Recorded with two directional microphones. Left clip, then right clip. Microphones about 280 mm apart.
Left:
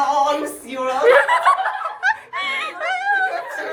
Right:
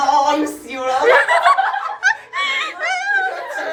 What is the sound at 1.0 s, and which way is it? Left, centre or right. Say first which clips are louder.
Snicker: right 1 dB; centre.